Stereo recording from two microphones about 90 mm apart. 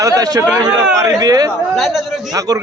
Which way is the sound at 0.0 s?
35° right (ahead or behind).